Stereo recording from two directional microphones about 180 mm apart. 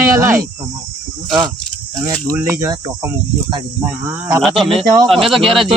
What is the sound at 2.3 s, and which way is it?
Speech, 15° right (ahead or behind).